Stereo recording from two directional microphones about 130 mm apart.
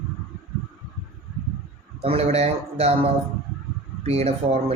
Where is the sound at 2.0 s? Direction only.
50° right (ahead or behind).